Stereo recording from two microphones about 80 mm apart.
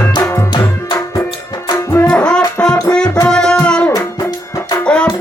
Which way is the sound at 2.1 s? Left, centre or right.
Centre.